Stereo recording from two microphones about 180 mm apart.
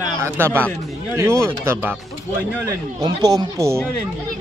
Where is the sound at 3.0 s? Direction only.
20° right (ahead or behind).